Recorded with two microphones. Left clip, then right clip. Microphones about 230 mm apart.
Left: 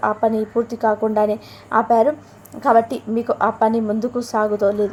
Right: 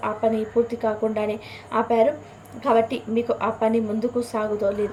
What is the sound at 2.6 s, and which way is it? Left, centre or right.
A woman's voice, left.